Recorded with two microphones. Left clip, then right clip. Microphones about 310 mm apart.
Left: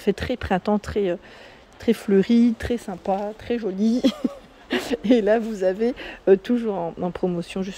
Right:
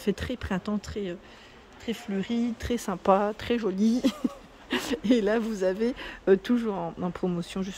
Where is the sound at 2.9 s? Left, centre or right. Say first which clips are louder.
Right 7 dB; centre.